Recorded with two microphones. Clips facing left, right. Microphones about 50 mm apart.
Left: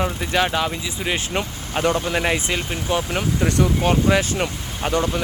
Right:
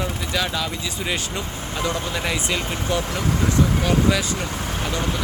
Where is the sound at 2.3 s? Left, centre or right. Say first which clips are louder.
Left 1 dB; left.